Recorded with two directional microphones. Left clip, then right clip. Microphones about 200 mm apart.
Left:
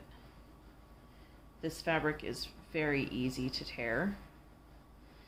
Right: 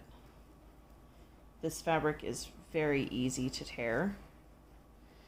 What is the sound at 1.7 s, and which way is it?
Speech, 35° right (ahead or behind).